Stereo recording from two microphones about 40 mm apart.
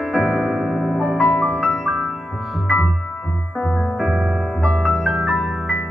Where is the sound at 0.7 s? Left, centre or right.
Centre.